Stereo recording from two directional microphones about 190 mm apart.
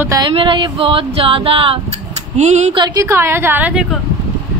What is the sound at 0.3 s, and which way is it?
Speech, 25° right (ahead or behind).